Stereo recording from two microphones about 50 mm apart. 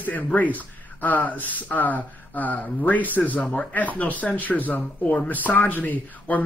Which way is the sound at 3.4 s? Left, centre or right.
Centre.